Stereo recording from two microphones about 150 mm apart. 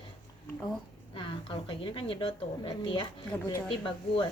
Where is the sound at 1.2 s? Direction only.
35° left (ahead or behind).